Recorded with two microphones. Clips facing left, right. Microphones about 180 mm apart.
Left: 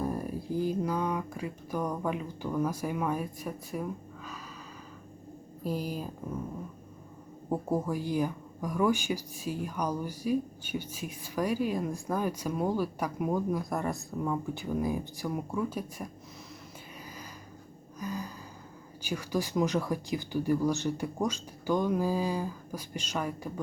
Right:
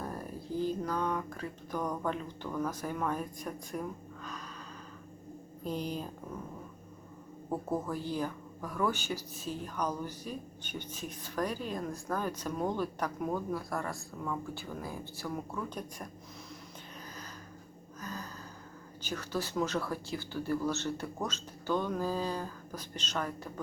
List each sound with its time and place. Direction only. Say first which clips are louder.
0.0 s speech: left 7 dB; 10° left (ahead or behind)
5.6 s speech: left 2 dB; 5° left (ahead or behind)
7.5 s speech: left 4 dB; 10° left (ahead or behind)
18.0 s a sound: left 6 dB; 10° left (ahead or behind)
19.0 s speech: left 4 dB; 10° left (ahead or behind)